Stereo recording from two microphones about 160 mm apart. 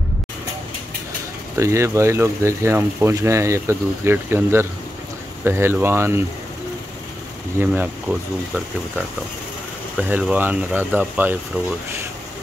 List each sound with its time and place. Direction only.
1.6 s speech: 20° right (ahead or behind)
7.5 s speech: 10° right (ahead or behind)
9.9 s speech: 5° right (ahead or behind)